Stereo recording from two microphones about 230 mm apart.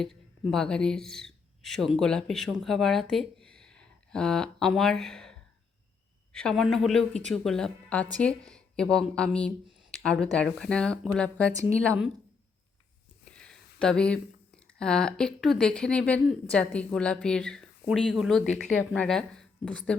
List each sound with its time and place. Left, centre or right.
0.0 s speech: centre
13.2 s speech: centre